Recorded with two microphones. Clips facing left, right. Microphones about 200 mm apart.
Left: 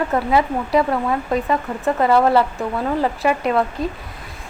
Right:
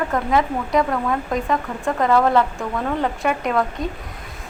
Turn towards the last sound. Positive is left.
turn(degrees=5)  # may be behind; listen again after turning